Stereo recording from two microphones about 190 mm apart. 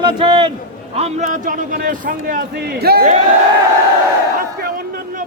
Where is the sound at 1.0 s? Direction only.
35° right (ahead or behind); by 3.0 s 55° right (ahead or behind).